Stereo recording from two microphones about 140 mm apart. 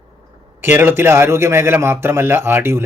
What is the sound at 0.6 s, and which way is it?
A man's voice, 15° right (ahead or behind).